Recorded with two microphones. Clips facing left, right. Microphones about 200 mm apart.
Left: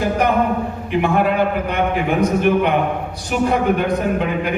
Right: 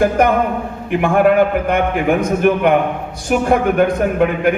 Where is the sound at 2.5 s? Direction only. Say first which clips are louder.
Right 3 dB; 50° right (ahead or behind).